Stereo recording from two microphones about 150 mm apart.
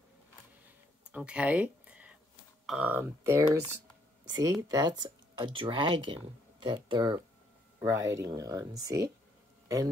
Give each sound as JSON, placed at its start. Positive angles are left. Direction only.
{"t": 1.1, "sound": "a sound", "side_deg": -10}
{"t": 2.6, "sound": "speech", "side_deg": -5}
{"t": 7.8, "sound": "speech", "side_deg": -20}